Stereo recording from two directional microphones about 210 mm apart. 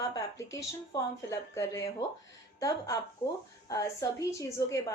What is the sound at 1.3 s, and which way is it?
A woman's voice, 15° left (ahead or behind).